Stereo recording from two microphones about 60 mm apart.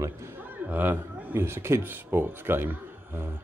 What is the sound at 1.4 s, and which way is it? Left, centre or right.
Speech, right.